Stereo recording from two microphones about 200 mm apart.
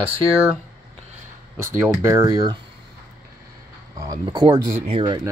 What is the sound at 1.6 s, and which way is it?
Speech, 10° right (ahead or behind).